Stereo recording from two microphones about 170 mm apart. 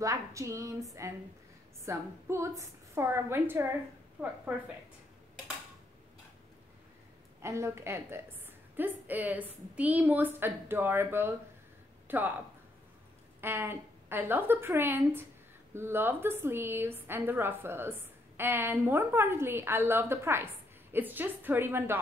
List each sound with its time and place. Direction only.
0.0 s speech: 20° right (ahead or behind)
1.9 s a woman's voice: 15° right (ahead or behind)
7.4 s a woman's voice: 15° right (ahead or behind)
13.4 s a woman's voice: 15° right (ahead or behind)